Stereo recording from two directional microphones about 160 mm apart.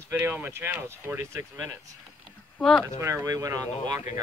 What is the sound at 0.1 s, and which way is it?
Speech, 15° right (ahead or behind).